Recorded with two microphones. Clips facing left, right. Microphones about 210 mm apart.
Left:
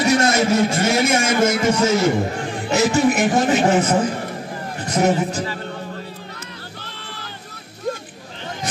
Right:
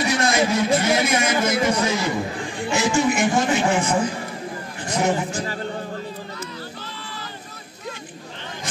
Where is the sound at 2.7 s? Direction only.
40° left (ahead or behind).